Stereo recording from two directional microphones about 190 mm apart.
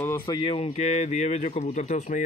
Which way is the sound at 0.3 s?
30° left (ahead or behind).